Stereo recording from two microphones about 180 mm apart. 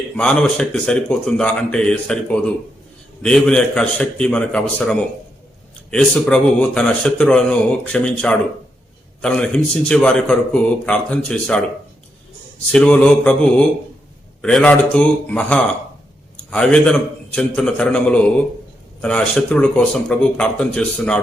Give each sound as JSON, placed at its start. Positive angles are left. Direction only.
{"t": 0.2, "sound": "speech", "side_deg": 5}
{"t": 12.6, "sound": "speech", "side_deg": 5}